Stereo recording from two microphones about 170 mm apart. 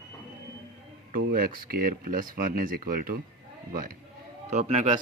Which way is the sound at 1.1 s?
60° right (ahead or behind).